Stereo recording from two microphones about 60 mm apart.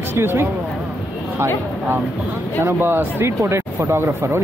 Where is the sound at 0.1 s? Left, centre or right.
Right.